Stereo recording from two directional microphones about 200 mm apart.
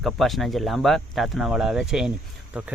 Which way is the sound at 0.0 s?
Centre (ahead or behind).